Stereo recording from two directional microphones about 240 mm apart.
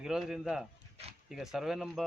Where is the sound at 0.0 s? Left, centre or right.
Centre.